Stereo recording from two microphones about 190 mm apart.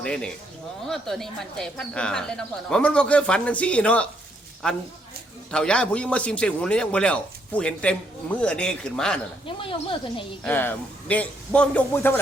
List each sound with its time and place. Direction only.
0.0 s a man's voice: 5° left (ahead or behind)
9.5 s speech: 25° left (ahead or behind)
10.4 s a man's voice: 10° left (ahead or behind)